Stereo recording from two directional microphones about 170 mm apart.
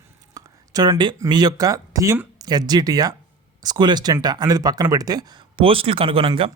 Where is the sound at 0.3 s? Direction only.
20° right (ahead or behind).